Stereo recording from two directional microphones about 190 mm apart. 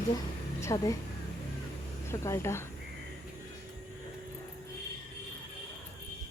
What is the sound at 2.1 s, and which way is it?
Speech, 15° left (ahead or behind).